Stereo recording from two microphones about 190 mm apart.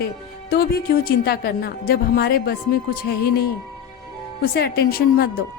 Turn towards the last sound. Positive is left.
turn(degrees=50)  # may be behind; listen again after turning